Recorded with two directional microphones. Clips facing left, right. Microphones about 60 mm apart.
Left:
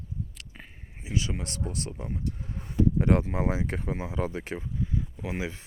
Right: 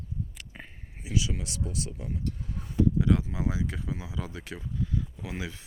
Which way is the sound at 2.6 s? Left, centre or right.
Left.